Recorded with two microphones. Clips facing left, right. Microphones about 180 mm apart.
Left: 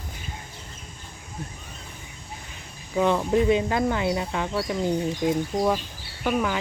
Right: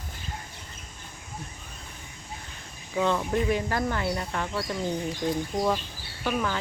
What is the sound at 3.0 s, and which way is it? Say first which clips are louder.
Speech: left 4 dB; 20° left (ahead or behind).